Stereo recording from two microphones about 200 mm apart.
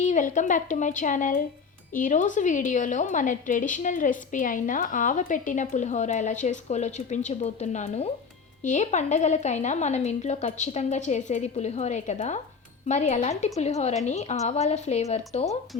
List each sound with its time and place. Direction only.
0.0 s a woman's voice: 40° left (ahead or behind)